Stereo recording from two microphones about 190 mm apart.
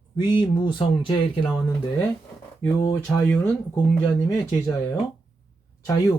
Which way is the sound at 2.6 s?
15° left (ahead or behind).